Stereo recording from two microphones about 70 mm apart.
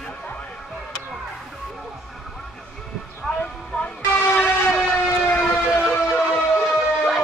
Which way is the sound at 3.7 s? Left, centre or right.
Left.